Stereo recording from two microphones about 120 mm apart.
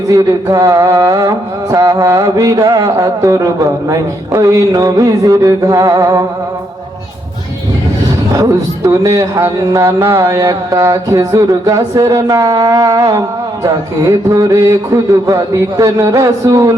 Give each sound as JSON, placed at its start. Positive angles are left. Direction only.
{"t": 0.1, "sound": "speech", "side_deg": -25}
{"t": 8.3, "sound": "speech", "side_deg": -25}